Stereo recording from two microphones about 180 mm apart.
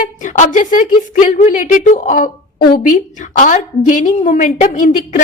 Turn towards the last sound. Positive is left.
turn(degrees=40)  # may be behind; listen again after turning